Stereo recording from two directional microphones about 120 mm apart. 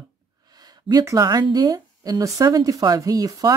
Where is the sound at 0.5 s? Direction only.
35° right (ahead or behind).